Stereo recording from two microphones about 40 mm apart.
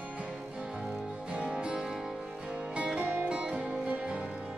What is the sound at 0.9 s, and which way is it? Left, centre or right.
Music, right.